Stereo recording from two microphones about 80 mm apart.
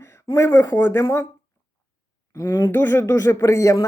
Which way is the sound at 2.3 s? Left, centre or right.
Left.